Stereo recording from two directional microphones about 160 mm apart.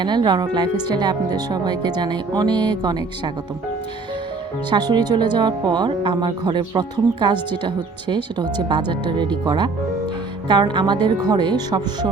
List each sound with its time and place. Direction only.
0.0 s speech: 30° right (ahead or behind)
4.7 s speech: 25° right (ahead or behind)